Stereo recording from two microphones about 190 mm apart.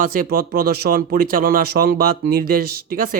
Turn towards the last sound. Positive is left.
turn(degrees=-50)  # may be behind; listen again after turning